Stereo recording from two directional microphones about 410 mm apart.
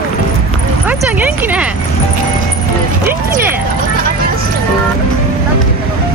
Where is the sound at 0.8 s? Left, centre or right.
Centre.